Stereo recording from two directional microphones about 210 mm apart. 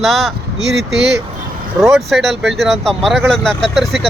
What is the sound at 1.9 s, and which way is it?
Speech, centre (ahead or behind).